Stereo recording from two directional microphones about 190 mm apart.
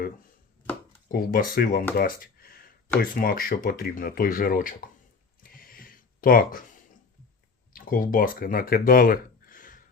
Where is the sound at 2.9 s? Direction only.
50° left (ahead or behind).